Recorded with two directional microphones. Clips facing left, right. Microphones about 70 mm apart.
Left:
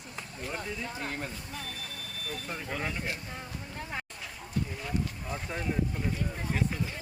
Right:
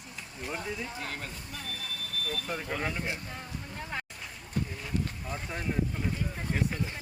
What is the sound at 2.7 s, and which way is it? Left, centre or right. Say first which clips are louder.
Speech: right 1 dB; centre.